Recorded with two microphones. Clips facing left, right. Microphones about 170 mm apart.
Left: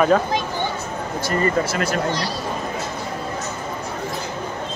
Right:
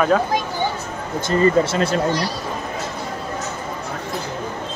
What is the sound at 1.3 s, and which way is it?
Speech, 30° right (ahead or behind).